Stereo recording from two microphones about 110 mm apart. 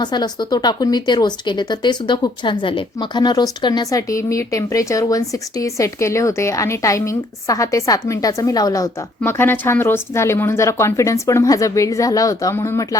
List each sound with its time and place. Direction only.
0.0 s speech: 40° left (ahead or behind)
9.2 s a woman's voice: 20° left (ahead or behind)